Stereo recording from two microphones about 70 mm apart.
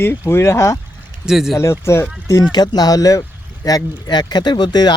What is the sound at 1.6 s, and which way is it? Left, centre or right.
Speech, left.